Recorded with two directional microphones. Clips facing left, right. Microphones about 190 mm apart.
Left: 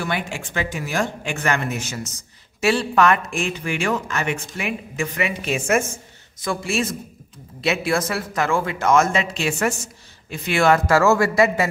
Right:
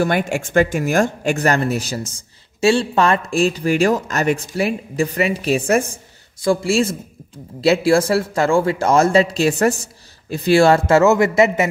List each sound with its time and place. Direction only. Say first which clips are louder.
0.0 s a man's voice: right 8 dB; 45° right (ahead or behind); by 11.6 s 20° right (ahead or behind)